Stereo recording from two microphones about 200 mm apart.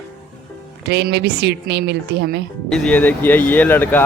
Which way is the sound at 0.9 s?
60° right (ahead or behind).